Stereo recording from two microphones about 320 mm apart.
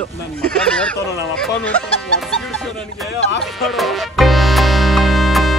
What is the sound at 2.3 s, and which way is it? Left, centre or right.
Music, centre.